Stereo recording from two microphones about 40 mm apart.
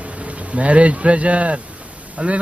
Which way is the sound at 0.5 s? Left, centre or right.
Right.